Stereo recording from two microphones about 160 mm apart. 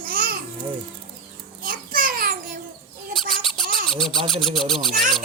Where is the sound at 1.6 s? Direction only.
60° right (ahead or behind).